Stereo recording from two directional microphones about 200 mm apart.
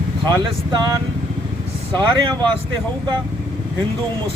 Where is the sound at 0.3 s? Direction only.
20° right (ahead or behind).